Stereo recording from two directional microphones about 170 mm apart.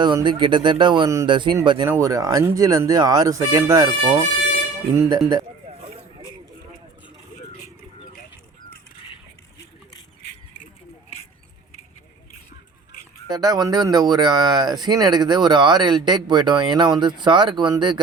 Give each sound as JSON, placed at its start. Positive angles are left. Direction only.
{"t": 0.0, "sound": "speech", "side_deg": -25}
{"t": 4.9, "sound": "speech", "side_deg": -25}
{"t": 13.3, "sound": "speech", "side_deg": -25}